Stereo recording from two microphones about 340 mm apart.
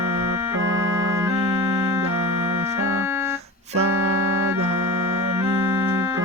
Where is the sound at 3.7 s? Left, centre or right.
Right.